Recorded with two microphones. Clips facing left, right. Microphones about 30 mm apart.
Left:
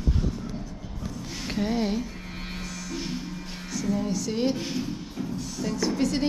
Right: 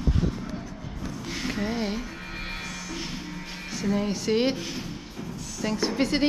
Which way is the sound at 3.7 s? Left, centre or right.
Right.